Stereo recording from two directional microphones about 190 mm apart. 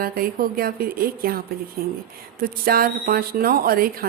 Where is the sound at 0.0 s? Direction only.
50° right (ahead or behind).